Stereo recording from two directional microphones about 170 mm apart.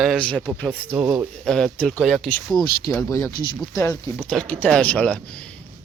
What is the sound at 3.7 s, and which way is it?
Speech, 20° left (ahead or behind).